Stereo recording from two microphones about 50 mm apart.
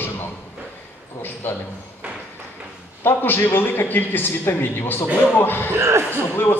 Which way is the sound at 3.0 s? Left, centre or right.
Left.